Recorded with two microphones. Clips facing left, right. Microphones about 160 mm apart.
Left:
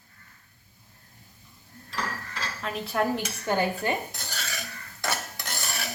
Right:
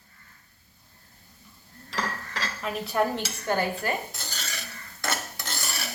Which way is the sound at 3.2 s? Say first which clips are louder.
Left 1 dB; 20° left (ahead or behind).